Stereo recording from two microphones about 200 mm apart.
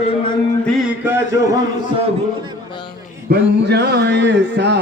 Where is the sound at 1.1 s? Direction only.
15° right (ahead or behind).